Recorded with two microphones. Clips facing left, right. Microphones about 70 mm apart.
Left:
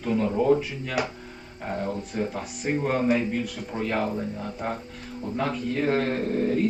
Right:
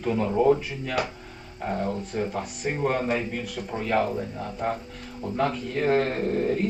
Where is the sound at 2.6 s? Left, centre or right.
Centre.